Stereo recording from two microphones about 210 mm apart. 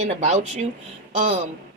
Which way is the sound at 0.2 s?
35° right (ahead or behind).